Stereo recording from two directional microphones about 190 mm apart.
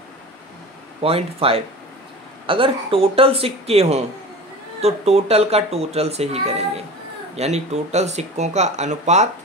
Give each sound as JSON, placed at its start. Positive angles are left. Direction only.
{"t": 1.0, "sound": "speech", "side_deg": -30}